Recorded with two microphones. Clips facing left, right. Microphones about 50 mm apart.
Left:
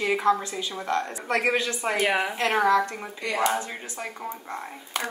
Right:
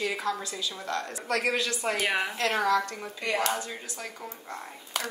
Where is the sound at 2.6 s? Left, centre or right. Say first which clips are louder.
Left 6 dB; left.